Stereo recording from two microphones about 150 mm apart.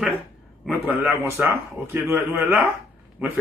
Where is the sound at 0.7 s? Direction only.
10° right (ahead or behind).